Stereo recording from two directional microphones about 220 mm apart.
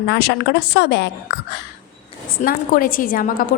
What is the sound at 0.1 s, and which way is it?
A woman's voice, 50° left (ahead or behind).